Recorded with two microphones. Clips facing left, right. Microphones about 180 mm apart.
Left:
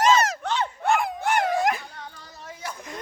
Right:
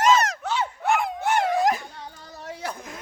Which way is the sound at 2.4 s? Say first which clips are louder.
Right 4 dB; 65° right (ahead or behind).